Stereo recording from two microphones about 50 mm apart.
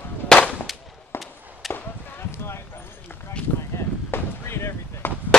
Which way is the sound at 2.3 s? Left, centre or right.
Left.